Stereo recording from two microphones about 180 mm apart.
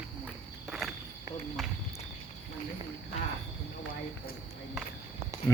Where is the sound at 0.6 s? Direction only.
Centre (ahead or behind).